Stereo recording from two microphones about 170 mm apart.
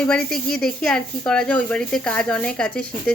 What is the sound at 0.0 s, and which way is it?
Speech, 5° left (ahead or behind).